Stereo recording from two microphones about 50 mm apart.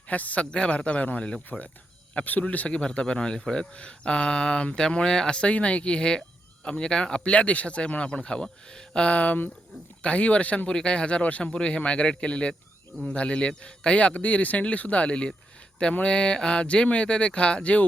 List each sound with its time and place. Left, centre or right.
0.1 s speech: left
0.5 s speech: centre
2.6 s speech: centre